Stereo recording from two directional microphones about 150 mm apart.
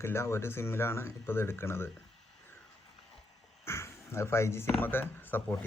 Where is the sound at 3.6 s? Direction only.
15° left (ahead or behind).